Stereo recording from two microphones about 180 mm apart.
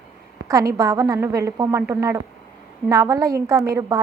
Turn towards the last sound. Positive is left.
turn(degrees=-15)  # may be behind; listen again after turning